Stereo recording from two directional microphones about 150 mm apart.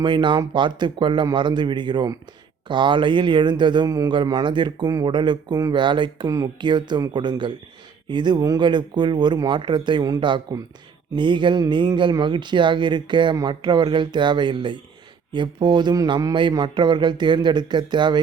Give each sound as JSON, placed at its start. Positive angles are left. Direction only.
{"t": 0.0, "sound": "speech", "side_deg": -30}